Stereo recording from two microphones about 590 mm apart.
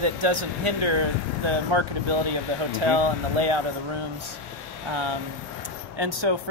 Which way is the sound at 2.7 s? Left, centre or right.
Right.